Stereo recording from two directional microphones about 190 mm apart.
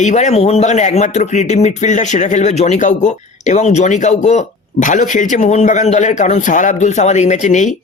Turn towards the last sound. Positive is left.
turn(degrees=40)  # may be behind; listen again after turning